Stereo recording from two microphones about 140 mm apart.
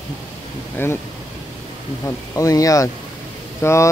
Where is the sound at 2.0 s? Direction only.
25° left (ahead or behind).